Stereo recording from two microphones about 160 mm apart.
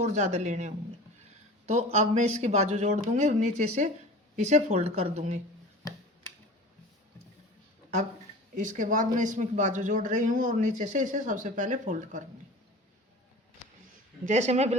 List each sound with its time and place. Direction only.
0.0 s speech: 45° right (ahead or behind)
8.5 s speech: 55° right (ahead or behind)
14.3 s speech: 45° right (ahead or behind)